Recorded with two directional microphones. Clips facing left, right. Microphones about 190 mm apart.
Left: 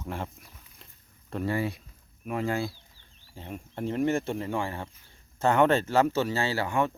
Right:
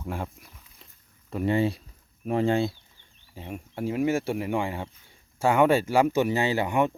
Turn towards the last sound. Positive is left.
turn(degrees=-20)  # may be behind; listen again after turning